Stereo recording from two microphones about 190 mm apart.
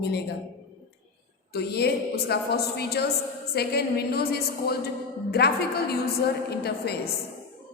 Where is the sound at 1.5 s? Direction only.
60° left (ahead or behind).